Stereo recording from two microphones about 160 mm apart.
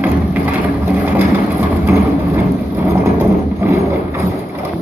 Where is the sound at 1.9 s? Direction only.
15° right (ahead or behind).